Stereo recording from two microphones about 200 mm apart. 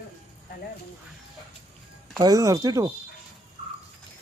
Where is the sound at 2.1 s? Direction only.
15° right (ahead or behind).